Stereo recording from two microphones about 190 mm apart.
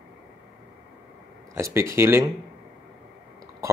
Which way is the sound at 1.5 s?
15° right (ahead or behind).